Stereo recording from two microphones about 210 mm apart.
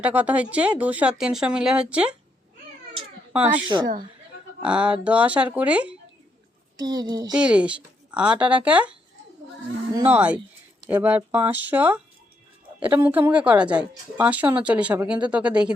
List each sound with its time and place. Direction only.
0.0 s speech: 5° right (ahead or behind)
3.3 s a woman's voice: 5° right (ahead or behind)
3.7 s speech: 20° right (ahead or behind)
4.6 s a woman's voice: 5° right (ahead or behind)
6.7 s speech: 20° right (ahead or behind)
7.3 s a woman's voice: 5° right (ahead or behind)